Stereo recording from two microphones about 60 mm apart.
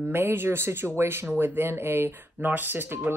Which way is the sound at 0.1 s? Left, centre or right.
Right.